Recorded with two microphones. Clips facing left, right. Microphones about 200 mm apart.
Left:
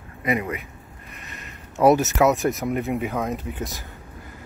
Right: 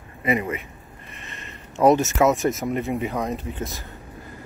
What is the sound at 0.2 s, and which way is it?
Speech, centre (ahead or behind).